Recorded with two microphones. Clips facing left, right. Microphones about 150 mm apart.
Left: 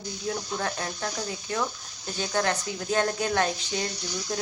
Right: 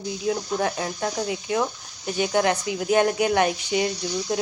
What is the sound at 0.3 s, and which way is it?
Speech, 15° right (ahead or behind).